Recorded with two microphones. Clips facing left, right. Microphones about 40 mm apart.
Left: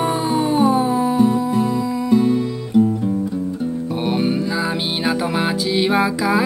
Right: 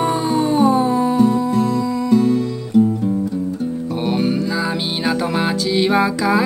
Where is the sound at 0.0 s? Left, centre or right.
Centre.